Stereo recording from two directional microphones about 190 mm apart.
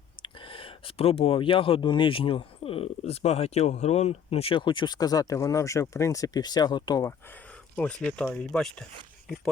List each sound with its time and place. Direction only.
0.2 s speech: 30° left (ahead or behind)
8.0 s speech: 5° left (ahead or behind)